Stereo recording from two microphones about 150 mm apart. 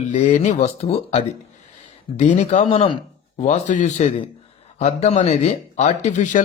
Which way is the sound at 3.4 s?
55° left (ahead or behind).